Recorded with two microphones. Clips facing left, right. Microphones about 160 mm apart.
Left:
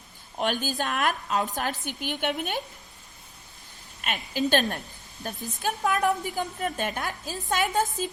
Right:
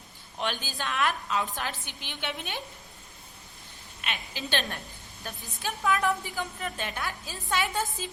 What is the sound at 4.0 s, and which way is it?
A woman's voice, 45° left (ahead or behind).